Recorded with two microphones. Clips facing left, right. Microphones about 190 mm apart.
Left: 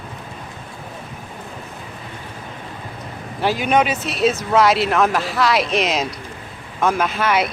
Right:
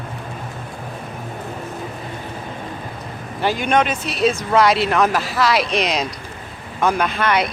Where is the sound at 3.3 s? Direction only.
Centre (ahead or behind).